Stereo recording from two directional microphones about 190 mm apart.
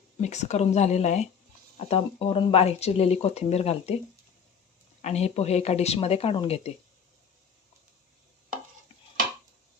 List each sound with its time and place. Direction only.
0.2 s speech: 35° left (ahead or behind)
5.0 s speech: 35° left (ahead or behind)